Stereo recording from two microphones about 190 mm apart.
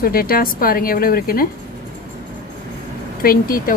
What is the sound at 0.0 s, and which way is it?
Speech, 50° left (ahead or behind).